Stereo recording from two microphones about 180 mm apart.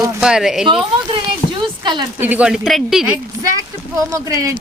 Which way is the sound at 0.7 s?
25° right (ahead or behind).